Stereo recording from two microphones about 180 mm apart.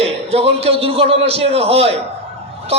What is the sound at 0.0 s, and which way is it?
A man's voice, 35° right (ahead or behind).